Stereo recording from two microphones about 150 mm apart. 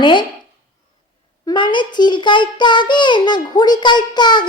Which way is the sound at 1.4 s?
30° left (ahead or behind).